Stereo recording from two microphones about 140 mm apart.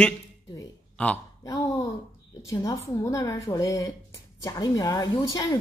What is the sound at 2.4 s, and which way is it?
A woman's voice, 20° left (ahead or behind).